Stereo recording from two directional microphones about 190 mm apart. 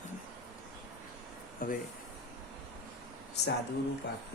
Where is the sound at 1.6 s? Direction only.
45° left (ahead or behind).